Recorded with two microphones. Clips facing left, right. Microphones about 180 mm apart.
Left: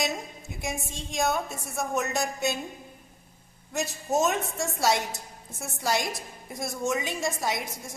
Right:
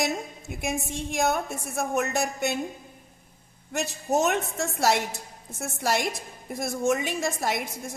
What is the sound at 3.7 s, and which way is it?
A woman's voice, 65° right (ahead or behind).